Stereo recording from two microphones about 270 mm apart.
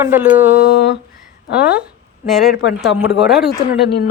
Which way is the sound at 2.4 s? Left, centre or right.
Left.